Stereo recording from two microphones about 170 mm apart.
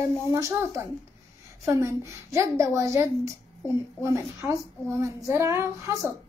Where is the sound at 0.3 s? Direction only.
15° right (ahead or behind).